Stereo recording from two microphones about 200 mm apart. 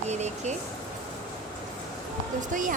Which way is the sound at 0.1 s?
35° right (ahead or behind).